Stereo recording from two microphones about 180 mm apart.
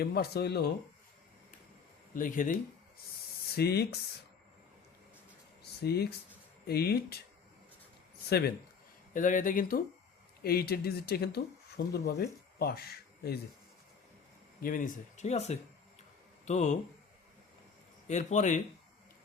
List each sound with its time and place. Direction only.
0.0 s speech: 60° left (ahead or behind)
2.1 s speech: 50° left (ahead or behind)
3.5 s speech: 60° left (ahead or behind)
5.8 s speech: 60° left (ahead or behind)
8.3 s speech: 65° left (ahead or behind)
9.1 s speech: 45° left (ahead or behind)
14.6 s speech: 50° left (ahead or behind)
18.1 s speech: 40° left (ahead or behind)